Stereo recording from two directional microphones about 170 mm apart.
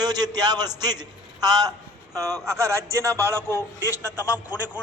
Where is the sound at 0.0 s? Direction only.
25° right (ahead or behind).